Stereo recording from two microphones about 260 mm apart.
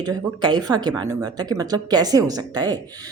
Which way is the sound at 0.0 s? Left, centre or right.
Centre.